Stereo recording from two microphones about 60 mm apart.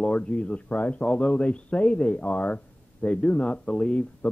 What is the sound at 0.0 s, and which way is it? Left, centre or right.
Speech, centre.